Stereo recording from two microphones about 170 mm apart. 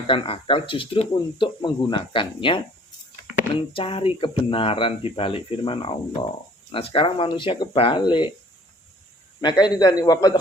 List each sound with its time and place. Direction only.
0.1 s speech: 30° left (ahead or behind)
3.7 s speech: 30° left (ahead or behind)
9.4 s speech: 25° left (ahead or behind)